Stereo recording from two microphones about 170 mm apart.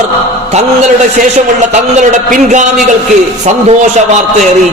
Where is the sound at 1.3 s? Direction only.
45° right (ahead or behind).